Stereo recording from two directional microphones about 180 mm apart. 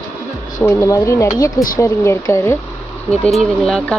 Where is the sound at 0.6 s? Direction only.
15° left (ahead or behind).